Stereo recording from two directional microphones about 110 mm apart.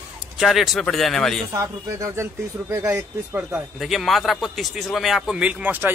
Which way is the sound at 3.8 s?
Centre (ahead or behind).